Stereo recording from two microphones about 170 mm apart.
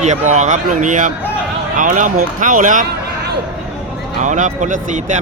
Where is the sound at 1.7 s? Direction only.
50° right (ahead or behind).